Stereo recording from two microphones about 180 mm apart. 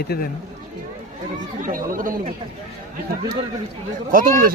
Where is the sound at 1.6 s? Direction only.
50° right (ahead or behind).